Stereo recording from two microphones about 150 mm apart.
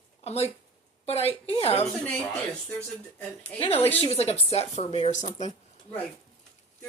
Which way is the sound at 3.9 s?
45° left (ahead or behind).